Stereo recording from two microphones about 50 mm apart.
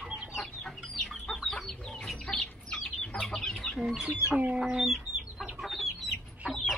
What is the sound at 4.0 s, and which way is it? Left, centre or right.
Speech, centre.